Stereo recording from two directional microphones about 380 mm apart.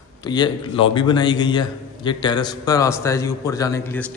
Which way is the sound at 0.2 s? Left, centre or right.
Centre.